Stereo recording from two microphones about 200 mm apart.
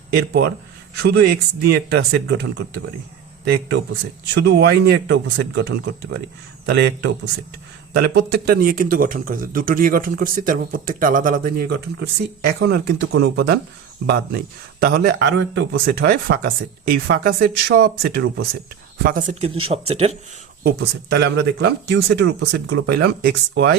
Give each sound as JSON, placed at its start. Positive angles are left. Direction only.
{"t": 1.0, "sound": "speech", "side_deg": -55}
{"t": 19.1, "sound": "speech", "side_deg": -40}
{"t": 20.7, "sound": "speech", "side_deg": -55}